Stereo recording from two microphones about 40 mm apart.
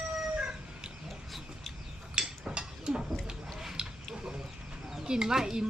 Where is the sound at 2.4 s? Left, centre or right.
Right.